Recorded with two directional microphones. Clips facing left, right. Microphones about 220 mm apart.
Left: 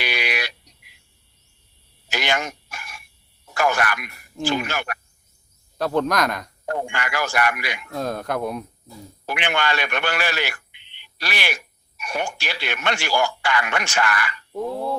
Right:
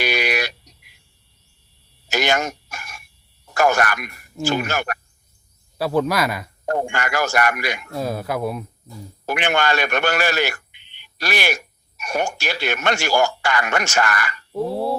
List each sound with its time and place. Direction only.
0.0 s a sound: 45° right (ahead or behind)
2.0 s a sound: 45° right (ahead or behind)
3.5 s speech: 45° right (ahead or behind)
5.7 s speech: 5° right (ahead or behind)
6.7 s speech: 45° right (ahead or behind)
7.9 s speech: 5° right (ahead or behind)
9.2 s a man's voice: 45° right (ahead or behind)